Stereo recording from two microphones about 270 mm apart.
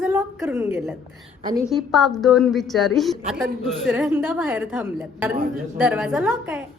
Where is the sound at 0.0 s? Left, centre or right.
Centre.